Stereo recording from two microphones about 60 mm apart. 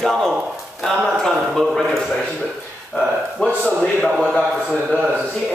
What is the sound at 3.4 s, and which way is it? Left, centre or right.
Speech, centre.